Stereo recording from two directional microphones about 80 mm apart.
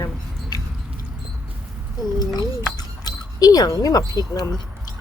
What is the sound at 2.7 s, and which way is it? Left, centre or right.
Speech, left.